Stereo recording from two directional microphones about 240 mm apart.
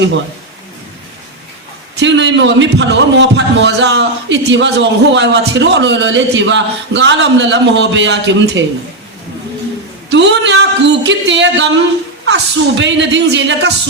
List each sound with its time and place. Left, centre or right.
2.0 s a man's voice: right
10.1 s a man's voice: right